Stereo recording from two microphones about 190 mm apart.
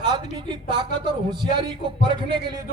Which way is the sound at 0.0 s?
25° right (ahead or behind).